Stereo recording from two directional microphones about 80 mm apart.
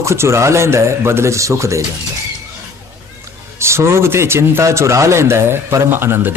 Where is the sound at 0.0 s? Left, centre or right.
Right.